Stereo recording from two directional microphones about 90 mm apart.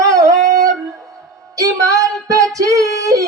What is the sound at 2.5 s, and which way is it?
Female singing, 40° right (ahead or behind).